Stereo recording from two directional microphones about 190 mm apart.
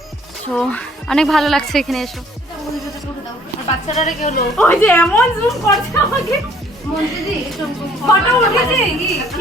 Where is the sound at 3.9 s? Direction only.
40° left (ahead or behind).